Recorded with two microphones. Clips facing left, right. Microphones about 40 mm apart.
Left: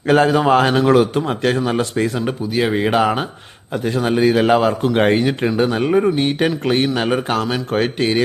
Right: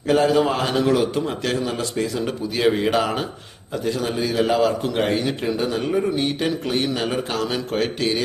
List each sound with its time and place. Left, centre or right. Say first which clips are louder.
0.3 s a man's voice: left 5 dB; left
2.7 s speech: left 4 dB; centre
3.8 s a man's voice: left 7 dB; left